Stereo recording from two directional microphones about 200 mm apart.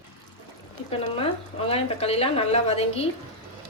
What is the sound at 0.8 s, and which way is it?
Speech, 30° left (ahead or behind).